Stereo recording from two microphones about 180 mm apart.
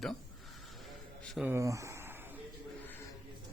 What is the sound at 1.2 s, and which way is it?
Speech, centre (ahead or behind).